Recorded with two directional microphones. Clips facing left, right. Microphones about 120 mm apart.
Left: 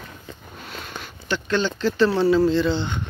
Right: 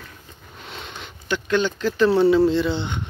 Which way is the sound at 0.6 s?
25° right (ahead or behind).